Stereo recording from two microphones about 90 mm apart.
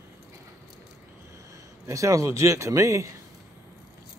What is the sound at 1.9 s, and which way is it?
Speech, 35° right (ahead or behind).